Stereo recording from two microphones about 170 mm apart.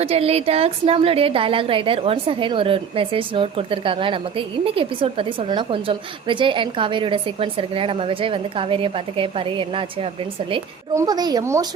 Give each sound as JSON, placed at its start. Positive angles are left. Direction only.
{"t": 0.0, "sound": "a woman's voice", "side_deg": -35}